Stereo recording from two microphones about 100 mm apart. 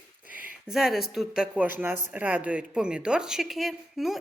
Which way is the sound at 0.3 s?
15° right (ahead or behind).